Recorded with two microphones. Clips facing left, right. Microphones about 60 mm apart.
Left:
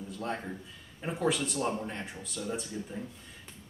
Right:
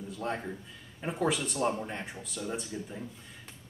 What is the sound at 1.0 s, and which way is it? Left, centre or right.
Speech, centre.